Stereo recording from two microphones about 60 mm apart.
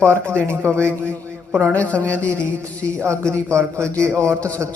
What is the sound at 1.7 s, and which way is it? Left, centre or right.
Speech, left.